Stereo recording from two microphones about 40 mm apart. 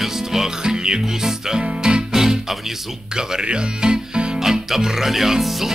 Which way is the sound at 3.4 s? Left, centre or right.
Right.